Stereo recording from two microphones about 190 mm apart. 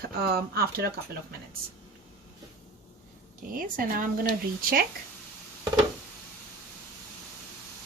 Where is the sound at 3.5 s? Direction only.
45° right (ahead or behind).